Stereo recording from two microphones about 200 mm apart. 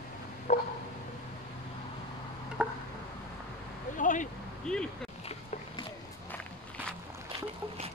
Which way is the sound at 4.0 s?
40° left (ahead or behind).